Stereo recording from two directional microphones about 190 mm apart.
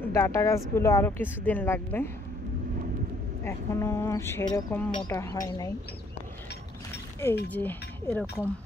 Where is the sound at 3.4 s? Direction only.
15° left (ahead or behind).